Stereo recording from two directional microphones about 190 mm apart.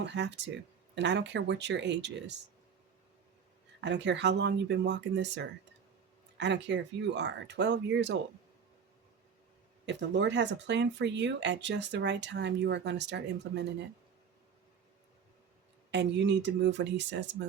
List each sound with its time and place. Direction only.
0.0 s speech: 65° right (ahead or behind)
3.8 s speech: 65° right (ahead or behind)
9.8 s speech: 65° right (ahead or behind)
15.9 s speech: 65° right (ahead or behind)